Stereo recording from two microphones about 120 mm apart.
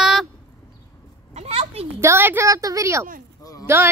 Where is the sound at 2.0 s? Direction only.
20° right (ahead or behind).